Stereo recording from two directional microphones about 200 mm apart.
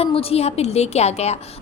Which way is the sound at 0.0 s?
30° left (ahead or behind).